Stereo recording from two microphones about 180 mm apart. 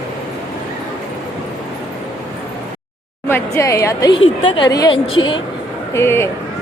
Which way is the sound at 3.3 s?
15° left (ahead or behind).